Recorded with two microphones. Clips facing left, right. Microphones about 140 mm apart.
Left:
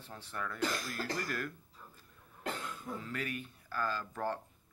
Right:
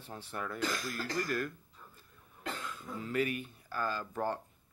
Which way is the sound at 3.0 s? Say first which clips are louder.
Right 10 dB; 10° right (ahead or behind).